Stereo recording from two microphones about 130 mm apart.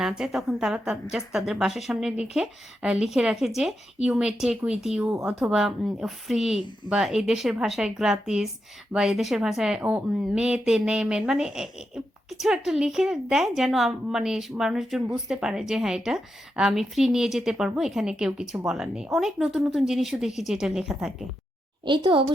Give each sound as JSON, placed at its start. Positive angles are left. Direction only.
{"t": 0.0, "sound": "speech", "side_deg": -5}
{"t": 21.8, "sound": "a woman's voice", "side_deg": -35}